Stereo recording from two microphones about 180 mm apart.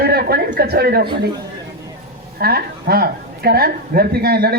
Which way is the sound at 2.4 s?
60° right (ahead or behind).